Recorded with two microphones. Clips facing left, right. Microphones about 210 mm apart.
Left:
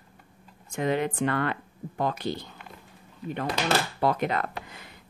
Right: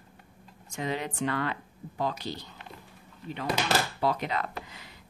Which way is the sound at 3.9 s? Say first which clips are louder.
Left 3 dB; 55° left (ahead or behind).